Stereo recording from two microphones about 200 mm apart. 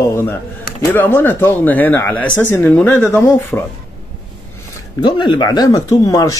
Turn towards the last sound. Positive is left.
turn(degrees=15)  # may be behind; listen again after turning